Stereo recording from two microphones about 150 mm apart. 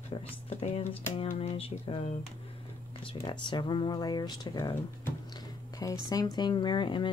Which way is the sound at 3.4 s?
30° left (ahead or behind).